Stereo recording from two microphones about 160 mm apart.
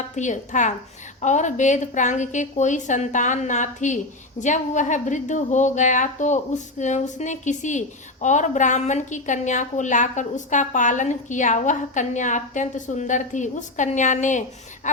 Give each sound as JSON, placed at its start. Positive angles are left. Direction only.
{"t": 0.2, "sound": "a woman's voice", "side_deg": 50}